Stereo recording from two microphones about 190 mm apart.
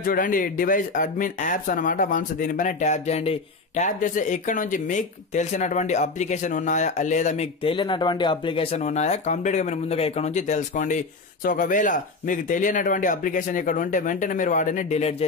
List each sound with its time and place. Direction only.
0.0 s speech: 45° left (ahead or behind)